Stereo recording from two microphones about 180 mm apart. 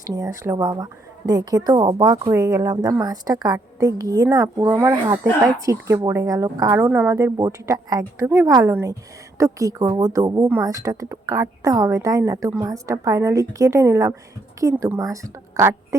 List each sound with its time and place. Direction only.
0.0 s a woman's voice: 20° right (ahead or behind)